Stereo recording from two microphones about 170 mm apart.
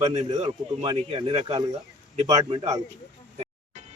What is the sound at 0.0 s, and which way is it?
Speech, 40° right (ahead or behind).